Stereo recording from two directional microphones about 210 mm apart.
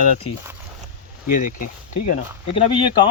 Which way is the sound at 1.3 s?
40° left (ahead or behind).